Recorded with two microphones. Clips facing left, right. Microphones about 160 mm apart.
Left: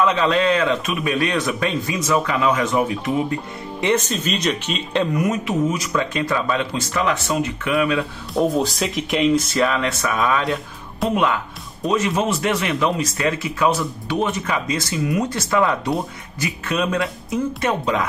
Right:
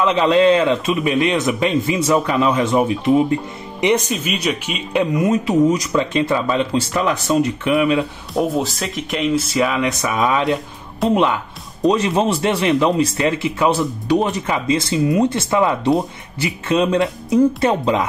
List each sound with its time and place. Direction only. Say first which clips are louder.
0.0 s a man's voice: right 4 dB; 25° right (ahead or behind)
3.8 s speech: right 3 dB; 10° right (ahead or behind)
5.2 s a man's voice: right 5 dB; 30° right (ahead or behind)
8.4 s speech: even; centre (ahead or behind); by 10.6 s 20° right (ahead or behind)
11.8 s a man's voice: right 4 dB; 35° right (ahead or behind)